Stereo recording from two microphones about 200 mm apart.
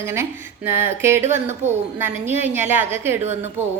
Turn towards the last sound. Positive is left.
turn(degrees=-35)  # may be behind; listen again after turning